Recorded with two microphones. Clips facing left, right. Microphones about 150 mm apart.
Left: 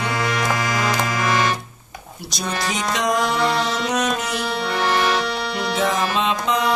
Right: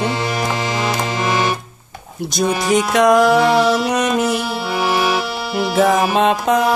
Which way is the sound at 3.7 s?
5° right (ahead or behind).